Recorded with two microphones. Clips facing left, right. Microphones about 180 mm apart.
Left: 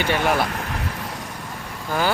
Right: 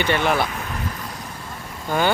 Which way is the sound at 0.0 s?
5° left (ahead or behind).